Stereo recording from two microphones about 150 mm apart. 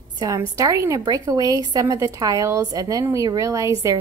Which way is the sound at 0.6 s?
20° right (ahead or behind).